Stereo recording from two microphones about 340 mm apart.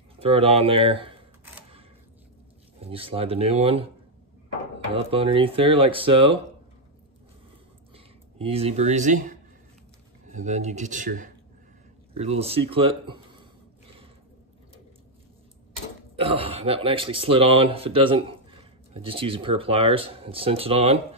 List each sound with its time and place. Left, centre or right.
0.2 s speech: centre
2.8 s speech: centre
4.9 s speech: centre
7.9 s speech: centre
12.1 s a sound: centre
16.2 s speech: centre